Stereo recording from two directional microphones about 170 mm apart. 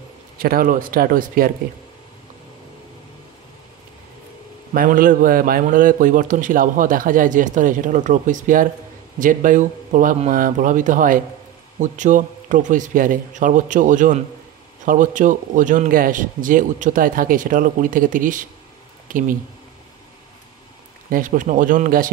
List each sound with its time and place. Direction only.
0.4 s speech: 60° right (ahead or behind)
4.7 s a man's voice: 55° right (ahead or behind)
21.1 s a man's voice: 50° right (ahead or behind)